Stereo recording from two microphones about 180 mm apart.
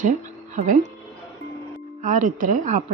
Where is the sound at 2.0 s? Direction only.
45° right (ahead or behind).